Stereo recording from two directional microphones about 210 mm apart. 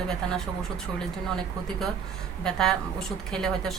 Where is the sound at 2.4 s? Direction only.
Centre (ahead or behind).